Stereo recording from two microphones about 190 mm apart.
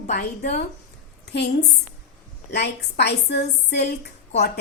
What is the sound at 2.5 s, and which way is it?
A woman's voice, 60° left (ahead or behind).